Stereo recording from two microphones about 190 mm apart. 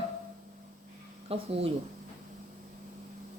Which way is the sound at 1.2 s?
30° right (ahead or behind).